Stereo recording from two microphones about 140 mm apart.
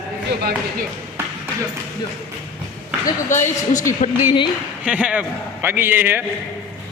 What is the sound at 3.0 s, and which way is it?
A woman's voice, 65° left (ahead or behind).